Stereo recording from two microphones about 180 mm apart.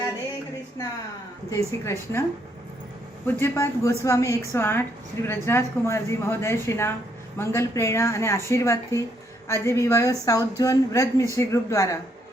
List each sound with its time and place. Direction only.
1.5 s a woman's voice: 15° left (ahead or behind)
3.3 s a woman's voice: 15° left (ahead or behind)